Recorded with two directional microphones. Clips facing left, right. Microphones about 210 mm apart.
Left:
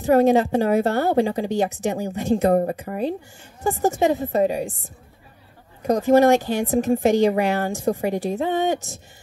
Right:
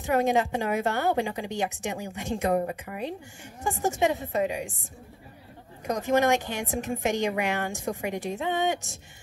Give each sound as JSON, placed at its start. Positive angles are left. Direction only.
{"t": 0.0, "sound": "speech", "side_deg": 35}
{"t": 5.9, "sound": "speech", "side_deg": 35}